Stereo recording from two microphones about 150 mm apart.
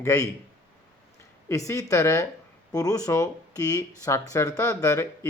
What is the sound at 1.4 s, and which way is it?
Speech, 20° left (ahead or behind).